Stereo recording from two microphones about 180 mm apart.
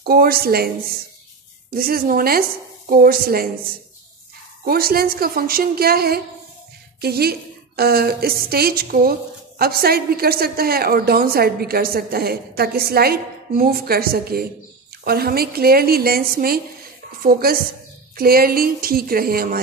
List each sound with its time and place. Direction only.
0.0 s a woman's voice: 60° right (ahead or behind)
4.6 s a woman's voice: 55° right (ahead or behind)